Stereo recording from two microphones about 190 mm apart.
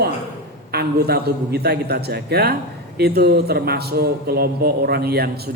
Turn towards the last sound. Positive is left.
turn(degrees=-55)  # may be behind; listen again after turning